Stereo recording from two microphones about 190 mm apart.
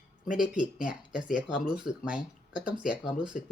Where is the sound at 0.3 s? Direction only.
5° right (ahead or behind).